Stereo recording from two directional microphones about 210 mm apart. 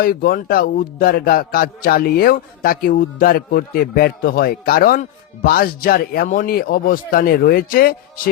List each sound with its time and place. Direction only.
0.0 s a man's voice: 45° left (ahead or behind)